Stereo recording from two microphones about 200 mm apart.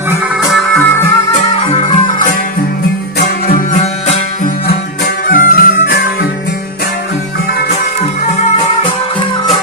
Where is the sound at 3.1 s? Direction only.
45° left (ahead or behind).